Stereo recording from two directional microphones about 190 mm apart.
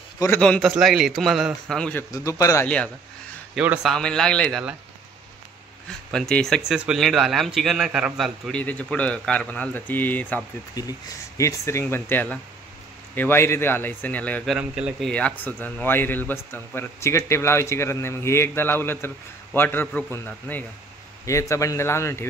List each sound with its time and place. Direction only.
0.2 s speech: 10° left (ahead or behind)
2.0 s speech: 15° left (ahead or behind)
3.5 s speech: 5° right (ahead or behind)
5.9 s speech: 5° left (ahead or behind)
10.7 s speech: 20° left (ahead or behind)